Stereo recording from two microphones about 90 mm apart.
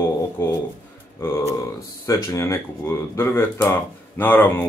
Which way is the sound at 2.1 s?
35° left (ahead or behind).